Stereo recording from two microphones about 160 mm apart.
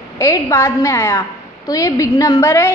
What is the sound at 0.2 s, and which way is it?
A woman's voice, 20° left (ahead or behind).